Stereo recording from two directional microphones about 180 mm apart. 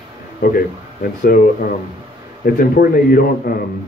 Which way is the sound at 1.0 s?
55° left (ahead or behind).